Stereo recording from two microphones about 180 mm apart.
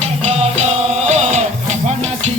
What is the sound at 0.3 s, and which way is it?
Music, 40° right (ahead or behind).